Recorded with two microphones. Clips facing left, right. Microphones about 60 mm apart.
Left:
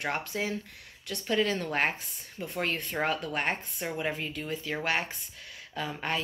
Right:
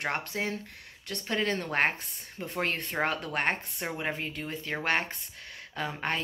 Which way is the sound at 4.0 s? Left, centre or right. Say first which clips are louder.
Left 2 dB; right.